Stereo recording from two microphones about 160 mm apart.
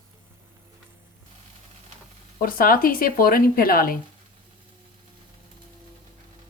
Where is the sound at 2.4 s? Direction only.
65° left (ahead or behind).